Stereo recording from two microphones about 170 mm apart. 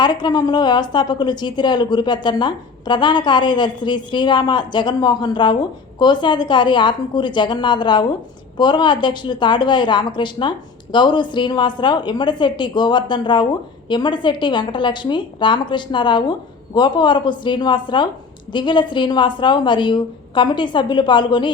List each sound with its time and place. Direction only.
0.0 s a woman's voice: 25° left (ahead or behind)